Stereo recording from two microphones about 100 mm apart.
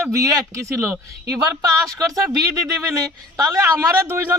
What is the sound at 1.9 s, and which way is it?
A man's voice, 35° right (ahead or behind).